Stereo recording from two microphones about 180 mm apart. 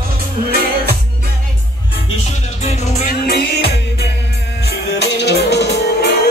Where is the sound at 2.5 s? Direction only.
40° left (ahead or behind).